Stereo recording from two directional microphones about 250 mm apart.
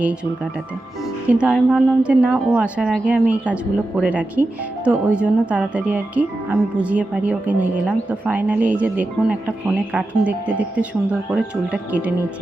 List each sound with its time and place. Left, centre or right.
1.3 s speech: centre